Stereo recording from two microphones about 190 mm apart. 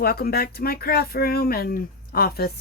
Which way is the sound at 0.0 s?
55° left (ahead or behind).